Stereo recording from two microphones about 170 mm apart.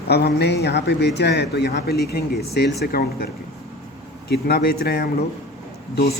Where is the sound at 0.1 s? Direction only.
75° left (ahead or behind).